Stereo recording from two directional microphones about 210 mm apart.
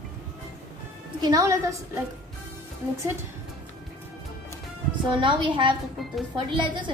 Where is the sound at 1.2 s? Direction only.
15° right (ahead or behind).